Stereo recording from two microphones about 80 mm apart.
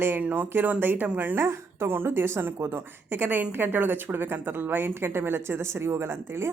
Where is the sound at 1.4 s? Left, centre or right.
Right.